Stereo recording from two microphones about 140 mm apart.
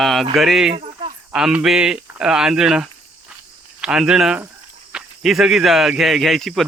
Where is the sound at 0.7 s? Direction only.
45° right (ahead or behind).